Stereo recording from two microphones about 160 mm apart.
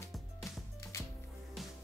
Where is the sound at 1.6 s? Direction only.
Centre (ahead or behind).